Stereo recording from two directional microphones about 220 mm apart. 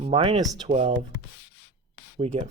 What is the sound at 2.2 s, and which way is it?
Speech, 30° right (ahead or behind).